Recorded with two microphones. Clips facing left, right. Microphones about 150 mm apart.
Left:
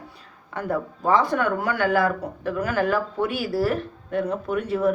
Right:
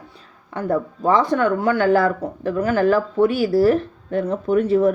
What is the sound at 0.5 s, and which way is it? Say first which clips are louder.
Speech: right 5 dB; 30° right (ahead or behind).